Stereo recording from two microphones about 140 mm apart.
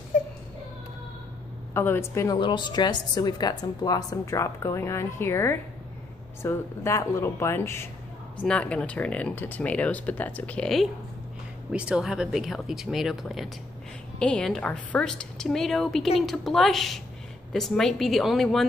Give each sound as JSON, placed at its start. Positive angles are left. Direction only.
{"t": 1.7, "sound": "a woman's voice", "side_deg": 15}
{"t": 2.3, "sound": "a woman's voice", "side_deg": 35}